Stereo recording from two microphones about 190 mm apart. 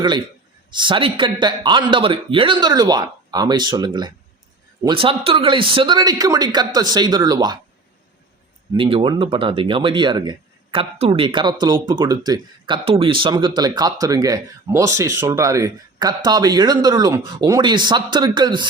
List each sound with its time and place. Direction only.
0.7 s speech: 25° right (ahead or behind)
8.7 s speech: 25° right (ahead or behind)